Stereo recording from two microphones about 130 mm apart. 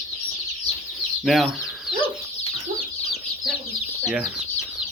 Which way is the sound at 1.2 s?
Centre (ahead or behind).